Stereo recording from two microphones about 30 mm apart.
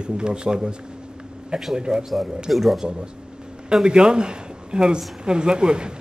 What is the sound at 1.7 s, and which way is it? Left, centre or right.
Speech, right.